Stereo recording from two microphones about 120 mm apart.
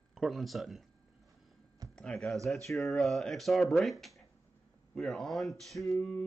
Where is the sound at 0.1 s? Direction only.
Centre (ahead or behind).